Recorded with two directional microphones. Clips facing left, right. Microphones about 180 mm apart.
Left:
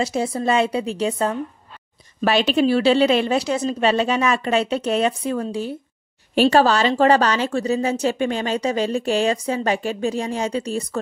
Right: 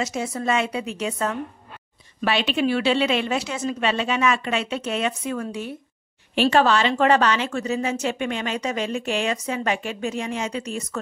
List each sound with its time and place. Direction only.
0.0 s a woman's voice: 30° left (ahead or behind)